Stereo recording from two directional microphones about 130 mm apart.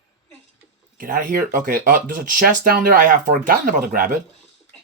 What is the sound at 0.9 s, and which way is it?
Speech, 90° right.